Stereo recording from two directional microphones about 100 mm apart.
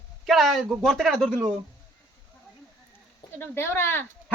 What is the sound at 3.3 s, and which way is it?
Speech, 25° left (ahead or behind).